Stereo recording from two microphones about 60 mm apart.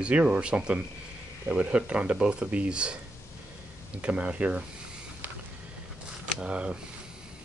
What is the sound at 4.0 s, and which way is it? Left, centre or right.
Speech, right.